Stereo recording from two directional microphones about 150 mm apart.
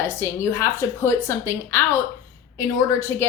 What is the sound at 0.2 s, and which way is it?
A woman's voice, 15° left (ahead or behind).